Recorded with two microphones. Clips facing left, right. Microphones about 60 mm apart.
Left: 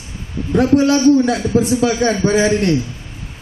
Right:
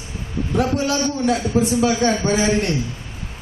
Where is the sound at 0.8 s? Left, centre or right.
Left.